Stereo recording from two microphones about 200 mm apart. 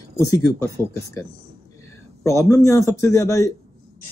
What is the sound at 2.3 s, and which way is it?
Speech, 15° left (ahead or behind).